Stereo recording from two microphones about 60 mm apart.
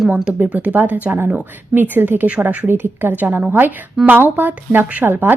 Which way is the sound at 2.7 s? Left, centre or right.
Right.